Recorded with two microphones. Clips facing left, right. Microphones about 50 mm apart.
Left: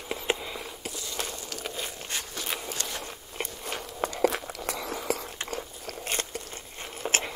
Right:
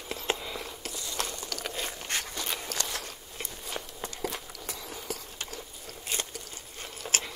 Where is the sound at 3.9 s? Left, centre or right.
Left.